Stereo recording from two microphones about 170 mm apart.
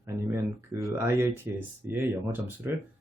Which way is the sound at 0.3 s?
15° right (ahead or behind).